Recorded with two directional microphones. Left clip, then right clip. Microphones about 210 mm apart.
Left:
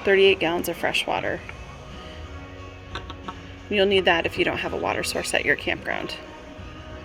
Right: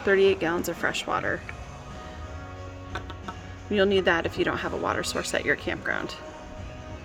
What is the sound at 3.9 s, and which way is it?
Speech, centre (ahead or behind).